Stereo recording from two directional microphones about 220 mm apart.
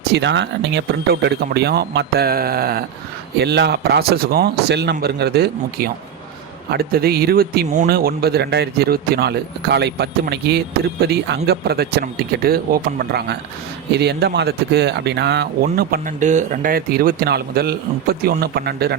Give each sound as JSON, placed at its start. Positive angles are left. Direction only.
{"t": 0.1, "sound": "speech", "side_deg": -50}